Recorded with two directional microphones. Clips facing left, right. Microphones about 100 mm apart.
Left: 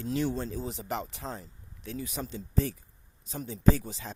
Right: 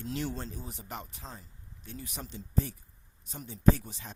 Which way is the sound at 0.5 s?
90° left.